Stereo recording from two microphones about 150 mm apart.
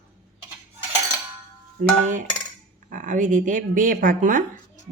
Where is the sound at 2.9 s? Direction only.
60° right (ahead or behind).